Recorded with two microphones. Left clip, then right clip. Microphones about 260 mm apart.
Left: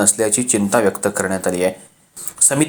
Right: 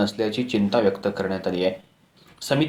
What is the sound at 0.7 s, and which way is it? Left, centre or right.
Speech, left.